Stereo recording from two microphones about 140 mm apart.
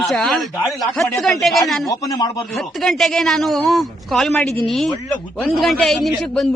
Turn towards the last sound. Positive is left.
turn(degrees=5)  # may be behind; listen again after turning